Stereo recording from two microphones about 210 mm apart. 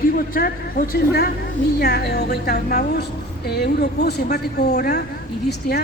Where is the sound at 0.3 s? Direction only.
45° left (ahead or behind).